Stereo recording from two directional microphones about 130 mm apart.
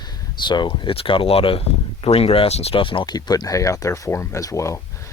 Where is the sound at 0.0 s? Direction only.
35° left (ahead or behind).